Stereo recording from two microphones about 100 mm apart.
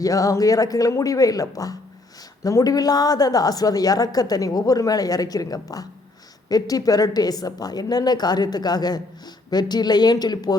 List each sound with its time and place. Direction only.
0.0 s a woman's voice: 35° left (ahead or behind)